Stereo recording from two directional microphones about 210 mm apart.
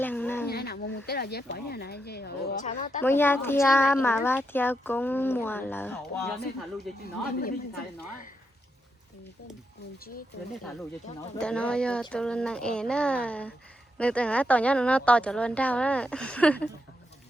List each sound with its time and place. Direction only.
0.0 s a sound: 10° left (ahead or behind)
0.4 s speech: 50° left (ahead or behind)
2.6 s a woman's voice: 35° left (ahead or behind)
3.0 s speech: 10° left (ahead or behind)
11.3 s a woman's voice: 5° left (ahead or behind)